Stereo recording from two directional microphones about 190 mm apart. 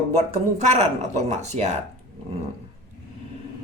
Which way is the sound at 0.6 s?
35° right (ahead or behind).